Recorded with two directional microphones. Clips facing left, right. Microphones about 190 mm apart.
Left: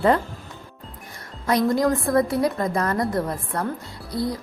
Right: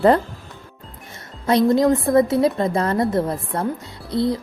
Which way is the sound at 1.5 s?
25° right (ahead or behind).